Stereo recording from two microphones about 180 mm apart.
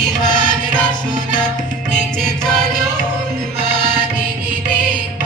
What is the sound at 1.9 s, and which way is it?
Music, 5° left (ahead or behind).